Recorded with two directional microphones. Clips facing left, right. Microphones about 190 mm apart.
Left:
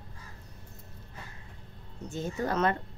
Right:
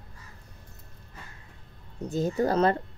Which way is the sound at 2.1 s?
35° right (ahead or behind).